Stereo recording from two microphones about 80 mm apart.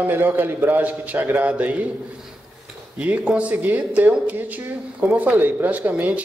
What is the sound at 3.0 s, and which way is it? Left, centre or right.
A man's voice, centre.